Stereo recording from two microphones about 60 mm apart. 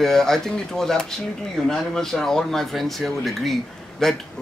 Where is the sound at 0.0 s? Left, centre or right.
Centre.